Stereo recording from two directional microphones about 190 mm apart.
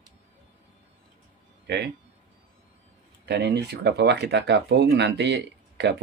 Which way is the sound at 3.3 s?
60° right (ahead or behind).